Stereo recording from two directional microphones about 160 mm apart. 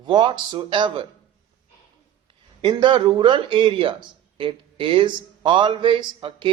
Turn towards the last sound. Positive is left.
turn(degrees=-30)  # may be behind; listen again after turning